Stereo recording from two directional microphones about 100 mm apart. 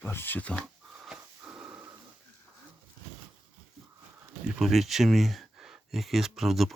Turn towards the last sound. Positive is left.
turn(degrees=0)  # may be behind; listen again after turning